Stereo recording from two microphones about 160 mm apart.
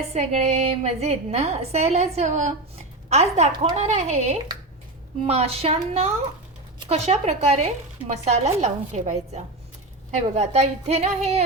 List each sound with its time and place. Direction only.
0.1 s a woman's voice: 40° right (ahead or behind)